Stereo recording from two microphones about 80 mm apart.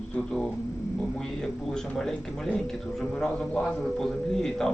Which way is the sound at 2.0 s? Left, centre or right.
Centre.